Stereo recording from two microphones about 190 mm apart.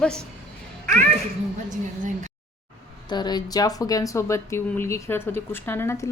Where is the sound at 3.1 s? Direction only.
20° left (ahead or behind).